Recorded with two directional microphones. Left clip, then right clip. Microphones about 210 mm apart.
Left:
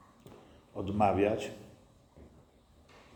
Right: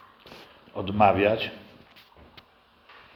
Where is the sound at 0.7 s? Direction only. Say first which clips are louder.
Right 8 dB; 20° right (ahead or behind).